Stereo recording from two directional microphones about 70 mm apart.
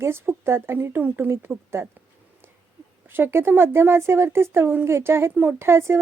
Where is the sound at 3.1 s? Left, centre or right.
Right.